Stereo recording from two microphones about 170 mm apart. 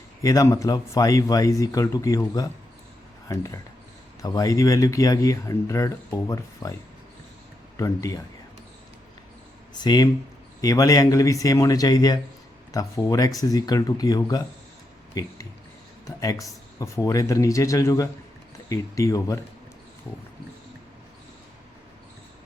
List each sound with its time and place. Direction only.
0.2 s speech: 20° left (ahead or behind)
7.8 s speech: 20° left (ahead or behind)
9.8 s speech: 25° left (ahead or behind)
16.0 s speech: 20° left (ahead or behind)